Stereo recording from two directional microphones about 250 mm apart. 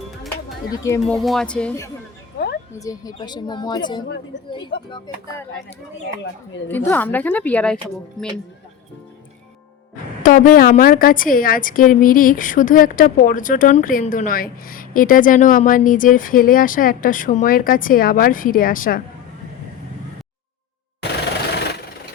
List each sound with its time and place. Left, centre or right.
0.7 s a woman's voice: centre
1.0 s a woman's voice: centre
6.7 s a woman's voice: centre
10.2 s a woman's voice: left